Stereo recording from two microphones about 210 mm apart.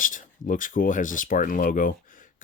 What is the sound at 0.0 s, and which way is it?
Speech, 40° left (ahead or behind).